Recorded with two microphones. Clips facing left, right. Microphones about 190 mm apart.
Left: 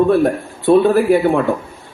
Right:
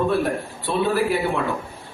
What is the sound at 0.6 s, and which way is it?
Speech, 50° left (ahead or behind).